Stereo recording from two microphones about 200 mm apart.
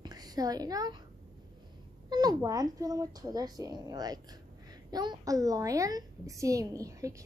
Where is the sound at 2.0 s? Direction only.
20° right (ahead or behind).